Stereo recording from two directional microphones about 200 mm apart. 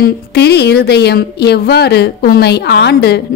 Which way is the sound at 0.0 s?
55° left (ahead or behind).